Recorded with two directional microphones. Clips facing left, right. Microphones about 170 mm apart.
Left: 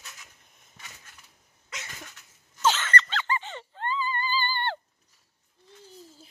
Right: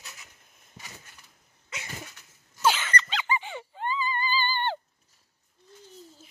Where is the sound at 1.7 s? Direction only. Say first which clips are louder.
Right 3 dB; 10° right (ahead or behind).